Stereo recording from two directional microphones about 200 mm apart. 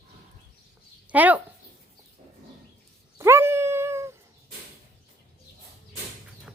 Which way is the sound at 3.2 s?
10° right (ahead or behind).